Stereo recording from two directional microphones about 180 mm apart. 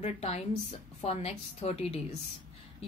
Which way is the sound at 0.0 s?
35° left (ahead or behind).